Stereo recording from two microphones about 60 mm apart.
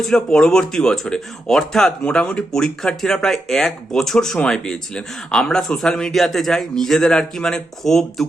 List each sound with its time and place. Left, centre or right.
0.0 s speech: centre